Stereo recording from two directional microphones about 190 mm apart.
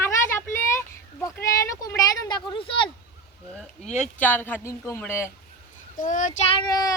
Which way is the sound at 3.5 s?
Centre (ahead or behind).